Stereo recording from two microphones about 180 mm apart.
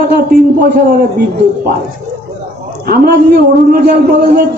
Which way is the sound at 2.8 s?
55° right (ahead or behind).